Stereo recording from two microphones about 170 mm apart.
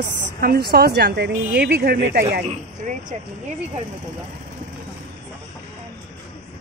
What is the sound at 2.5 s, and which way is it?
Speech, 45° right (ahead or behind).